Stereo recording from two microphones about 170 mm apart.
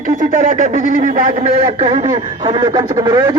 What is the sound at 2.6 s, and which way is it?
Speech, 25° right (ahead or behind).